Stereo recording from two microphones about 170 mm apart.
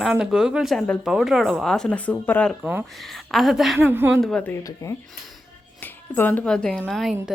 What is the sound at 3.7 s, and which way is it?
Speech, 15° right (ahead or behind).